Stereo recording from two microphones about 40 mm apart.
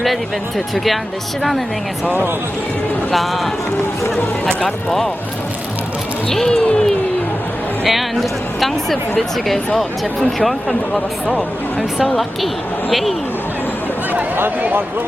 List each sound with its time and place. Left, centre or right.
3.1 s speech: centre
4.4 s speech: centre
6.3 s speech: centre
7.9 s speech: centre
12.0 s speech: centre
14.6 s a man's voice: right